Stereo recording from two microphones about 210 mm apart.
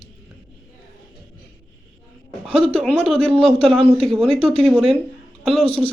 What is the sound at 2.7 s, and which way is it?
Speech, 5° left (ahead or behind).